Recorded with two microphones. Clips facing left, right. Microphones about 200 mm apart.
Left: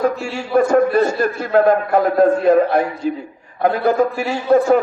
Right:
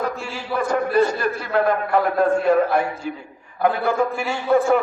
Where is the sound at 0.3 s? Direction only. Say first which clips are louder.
Left 9 dB; 45° left (ahead or behind).